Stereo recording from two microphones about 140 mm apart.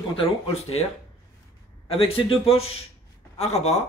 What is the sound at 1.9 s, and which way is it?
Speech, 40° left (ahead or behind).